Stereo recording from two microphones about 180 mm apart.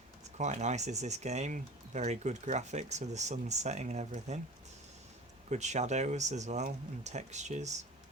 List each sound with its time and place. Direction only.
0.3 s speech: 40° right (ahead or behind)
5.5 s speech: 40° right (ahead or behind)